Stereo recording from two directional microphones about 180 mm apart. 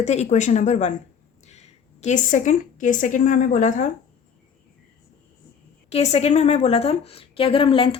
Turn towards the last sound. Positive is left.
turn(degrees=30)  # may be behind; listen again after turning